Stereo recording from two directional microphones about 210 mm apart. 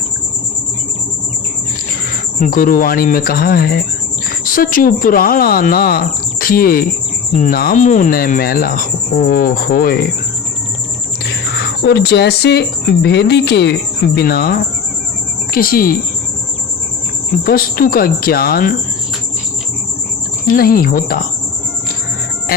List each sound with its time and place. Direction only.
2.4 s speech: 45° left (ahead or behind)
11.8 s speech: 50° left (ahead or behind)
17.4 s speech: 45° left (ahead or behind)
20.5 s speech: 45° left (ahead or behind)